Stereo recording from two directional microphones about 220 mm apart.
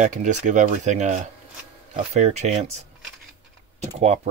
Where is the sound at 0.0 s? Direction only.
35° right (ahead or behind).